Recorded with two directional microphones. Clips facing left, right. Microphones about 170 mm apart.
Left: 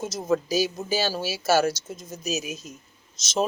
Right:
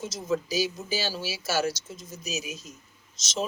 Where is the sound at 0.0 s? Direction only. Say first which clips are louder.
Left 4 dB; 50° left (ahead or behind).